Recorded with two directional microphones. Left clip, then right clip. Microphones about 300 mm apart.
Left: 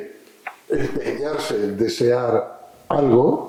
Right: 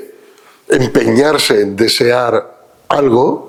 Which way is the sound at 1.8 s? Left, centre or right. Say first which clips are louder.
Right 8 dB; centre.